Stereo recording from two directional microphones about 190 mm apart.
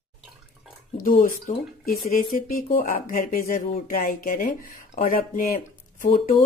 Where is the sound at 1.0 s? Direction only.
45° left (ahead or behind).